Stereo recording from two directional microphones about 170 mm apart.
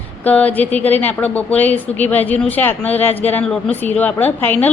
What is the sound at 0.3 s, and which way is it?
A woman's voice, 10° left (ahead or behind).